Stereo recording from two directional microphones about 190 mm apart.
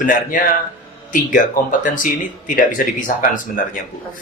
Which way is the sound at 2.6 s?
45° left (ahead or behind).